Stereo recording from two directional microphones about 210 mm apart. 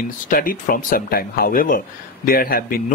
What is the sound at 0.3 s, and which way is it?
Speech, 40° left (ahead or behind).